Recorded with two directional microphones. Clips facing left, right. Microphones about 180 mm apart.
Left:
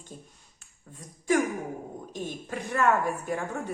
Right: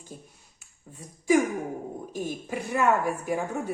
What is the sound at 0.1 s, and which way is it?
Speech, 5° right (ahead or behind).